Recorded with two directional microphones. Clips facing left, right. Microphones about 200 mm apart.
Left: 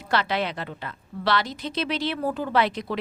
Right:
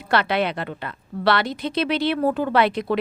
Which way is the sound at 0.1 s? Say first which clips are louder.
Right 4 dB; 60° right (ahead or behind).